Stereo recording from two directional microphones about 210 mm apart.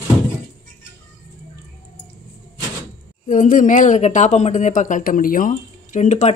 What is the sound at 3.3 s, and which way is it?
Speech, 40° left (ahead or behind).